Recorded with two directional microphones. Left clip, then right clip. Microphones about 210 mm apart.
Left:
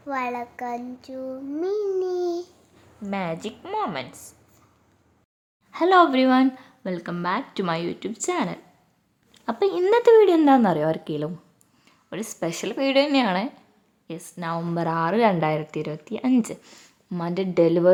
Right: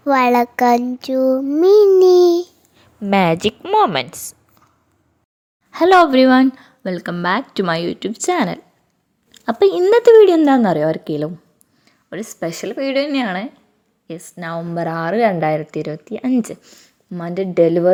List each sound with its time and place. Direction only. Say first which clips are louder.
0.0 s child singing: right 14 dB; 45° right (ahead or behind)
3.1 s a woman's voice: right 14 dB; 45° right (ahead or behind)
5.7 s speech: right 6 dB; 25° right (ahead or behind)
11.9 s speech: right 4 dB; 10° right (ahead or behind)